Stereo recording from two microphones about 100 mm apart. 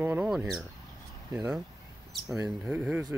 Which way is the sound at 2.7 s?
15° right (ahead or behind).